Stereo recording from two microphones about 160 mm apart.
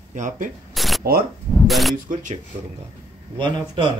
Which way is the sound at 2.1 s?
50° right (ahead or behind).